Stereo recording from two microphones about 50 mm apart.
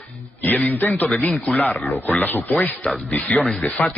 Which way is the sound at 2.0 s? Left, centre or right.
Left.